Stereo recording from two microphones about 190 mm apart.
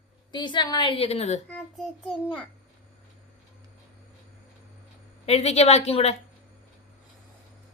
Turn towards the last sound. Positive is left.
turn(degrees=35)  # may be behind; listen again after turning